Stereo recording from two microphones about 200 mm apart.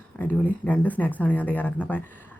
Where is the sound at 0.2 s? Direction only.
10° left (ahead or behind).